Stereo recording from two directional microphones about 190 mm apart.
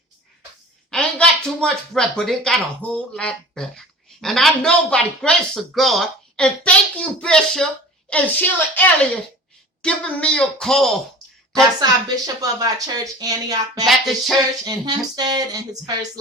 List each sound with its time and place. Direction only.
0.9 s a woman's voice: 5° left (ahead or behind)
11.8 s speech: 20° right (ahead or behind)
13.8 s speech: centre (ahead or behind)
14.6 s speech: 20° right (ahead or behind)